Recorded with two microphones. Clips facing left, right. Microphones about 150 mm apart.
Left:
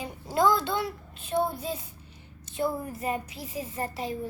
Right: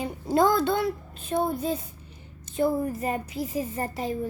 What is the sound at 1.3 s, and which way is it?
A woman's voice, 50° right (ahead or behind).